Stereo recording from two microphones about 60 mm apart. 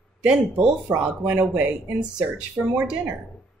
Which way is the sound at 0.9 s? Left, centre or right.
Right.